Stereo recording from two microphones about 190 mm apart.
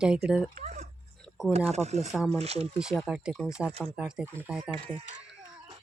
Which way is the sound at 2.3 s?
35° right (ahead or behind).